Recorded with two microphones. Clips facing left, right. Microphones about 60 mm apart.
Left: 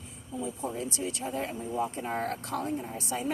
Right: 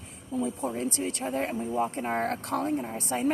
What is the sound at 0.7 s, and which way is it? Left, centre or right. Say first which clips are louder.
Speech: right 3 dB; right.